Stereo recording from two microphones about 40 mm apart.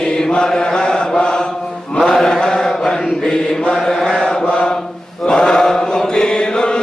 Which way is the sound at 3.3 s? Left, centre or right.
Centre.